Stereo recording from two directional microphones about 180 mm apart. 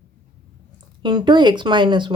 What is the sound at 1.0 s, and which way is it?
Speech, 25° right (ahead or behind).